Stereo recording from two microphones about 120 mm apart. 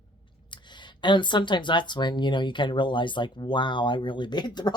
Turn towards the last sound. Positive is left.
turn(degrees=35)  # may be behind; listen again after turning